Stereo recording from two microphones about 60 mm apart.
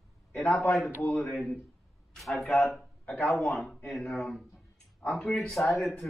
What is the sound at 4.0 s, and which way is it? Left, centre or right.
Speech, centre.